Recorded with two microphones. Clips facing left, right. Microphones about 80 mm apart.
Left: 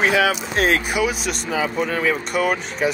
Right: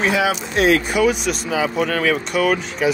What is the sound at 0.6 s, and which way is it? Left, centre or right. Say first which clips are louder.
Speech: right 4 dB; left.